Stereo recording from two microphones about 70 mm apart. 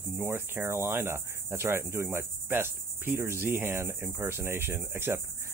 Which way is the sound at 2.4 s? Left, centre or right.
Right.